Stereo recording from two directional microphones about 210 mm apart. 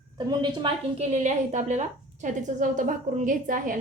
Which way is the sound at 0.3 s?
20° right (ahead or behind).